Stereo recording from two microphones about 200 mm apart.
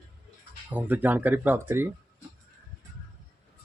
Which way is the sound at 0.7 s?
10° right (ahead or behind).